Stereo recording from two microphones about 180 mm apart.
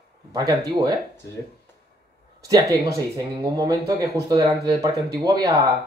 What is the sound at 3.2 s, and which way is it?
Speech, 20° right (ahead or behind).